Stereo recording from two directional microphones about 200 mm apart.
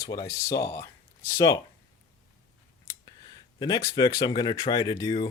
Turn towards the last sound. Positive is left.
turn(degrees=20)  # may be behind; listen again after turning